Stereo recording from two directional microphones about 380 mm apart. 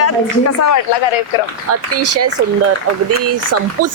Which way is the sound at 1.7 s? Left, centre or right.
Right.